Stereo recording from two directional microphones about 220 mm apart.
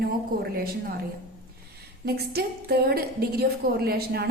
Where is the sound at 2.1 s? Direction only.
45° right (ahead or behind).